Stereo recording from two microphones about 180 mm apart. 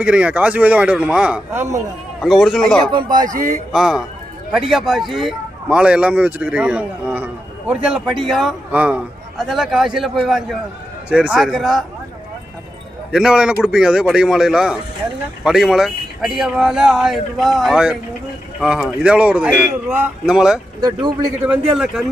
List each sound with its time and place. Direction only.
0.0 s speech: 5° right (ahead or behind)
3.2 s speech: 45° right (ahead or behind)
3.7 s speech: 5° right (ahead or behind)
13.1 s speech: 5° right (ahead or behind)